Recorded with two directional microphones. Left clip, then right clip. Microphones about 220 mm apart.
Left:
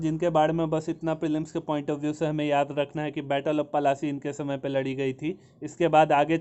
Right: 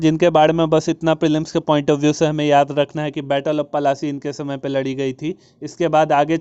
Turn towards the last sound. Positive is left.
turn(degrees=-20)  # may be behind; listen again after turning